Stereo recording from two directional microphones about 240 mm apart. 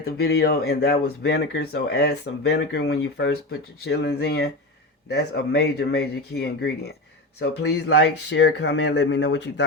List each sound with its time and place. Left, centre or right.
0.0 s speech: left